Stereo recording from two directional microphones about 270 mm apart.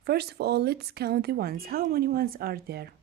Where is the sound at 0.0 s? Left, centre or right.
Right.